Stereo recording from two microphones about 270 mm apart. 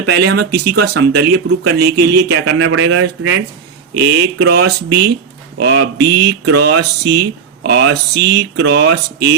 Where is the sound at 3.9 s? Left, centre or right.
Right.